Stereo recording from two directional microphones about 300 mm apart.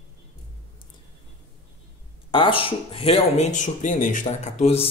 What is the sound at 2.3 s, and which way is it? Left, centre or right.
Speech, centre.